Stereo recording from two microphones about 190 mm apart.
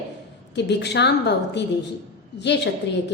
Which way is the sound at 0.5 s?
65° left (ahead or behind).